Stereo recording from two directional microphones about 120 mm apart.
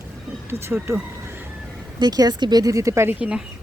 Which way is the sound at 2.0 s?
35° right (ahead or behind).